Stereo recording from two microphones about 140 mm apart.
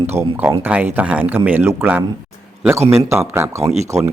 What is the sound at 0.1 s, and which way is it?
Speech, 15° right (ahead or behind).